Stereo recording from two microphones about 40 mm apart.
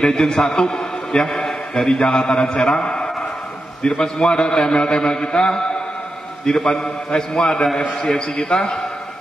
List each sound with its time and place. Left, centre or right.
0.0 s a man's voice: centre